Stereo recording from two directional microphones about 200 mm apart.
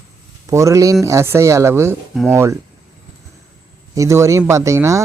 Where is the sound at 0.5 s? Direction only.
15° right (ahead or behind).